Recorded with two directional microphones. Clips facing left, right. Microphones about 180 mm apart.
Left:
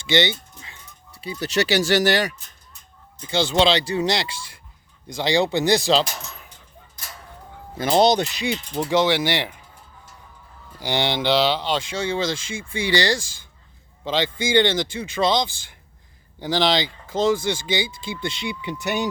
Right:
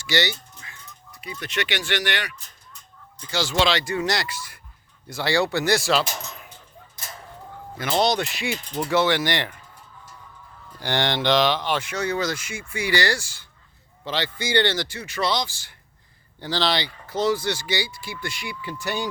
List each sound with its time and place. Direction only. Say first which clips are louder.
0.1 s music: left 4 dB; 25° left (ahead or behind)
1.2 s speech: left 6 dB; 30° left (ahead or behind)
3.2 s speech: left 4 dB; 25° left (ahead or behind)
5.0 s speech: left 2 dB; 15° left (ahead or behind)
7.8 s speech: left 5 dB; 35° left (ahead or behind)
8.9 s speech: left 2 dB; 15° left (ahead or behind)
10.8 s speech: left 1 dB; 10° left (ahead or behind)
11.9 s speech: left 1 dB; 25° left (ahead or behind)
14.0 s speech: left 4 dB; 15° left (ahead or behind)